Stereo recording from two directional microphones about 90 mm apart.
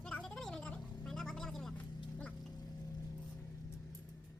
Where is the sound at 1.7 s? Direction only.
15° left (ahead or behind).